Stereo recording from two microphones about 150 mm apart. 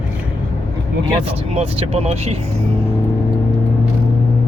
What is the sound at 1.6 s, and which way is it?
Speech, 40° right (ahead or behind).